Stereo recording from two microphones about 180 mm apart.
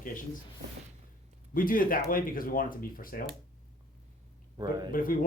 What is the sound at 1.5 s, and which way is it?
Speech, 50° left (ahead or behind).